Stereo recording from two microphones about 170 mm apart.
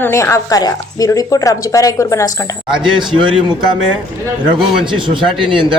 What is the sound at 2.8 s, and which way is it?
Speech, 25° right (ahead or behind).